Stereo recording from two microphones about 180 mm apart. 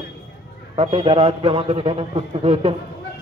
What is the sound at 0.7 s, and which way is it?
A man's voice, 30° right (ahead or behind).